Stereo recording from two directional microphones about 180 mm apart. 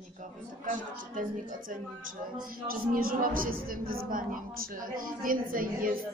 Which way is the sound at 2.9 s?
50° right (ahead or behind).